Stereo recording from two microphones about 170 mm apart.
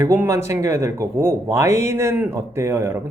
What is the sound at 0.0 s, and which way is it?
Speech, 15° right (ahead or behind).